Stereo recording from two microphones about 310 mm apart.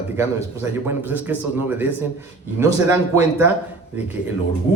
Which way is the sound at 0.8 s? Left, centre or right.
Centre.